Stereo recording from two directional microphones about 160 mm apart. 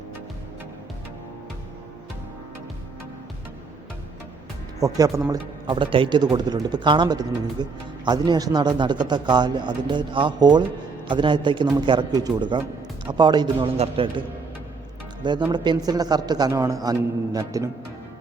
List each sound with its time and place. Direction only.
4.8 s speech: 20° right (ahead or behind)
5.6 s speech: 30° right (ahead or behind)